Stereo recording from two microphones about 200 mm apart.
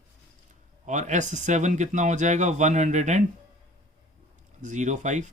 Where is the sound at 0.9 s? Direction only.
35° right (ahead or behind).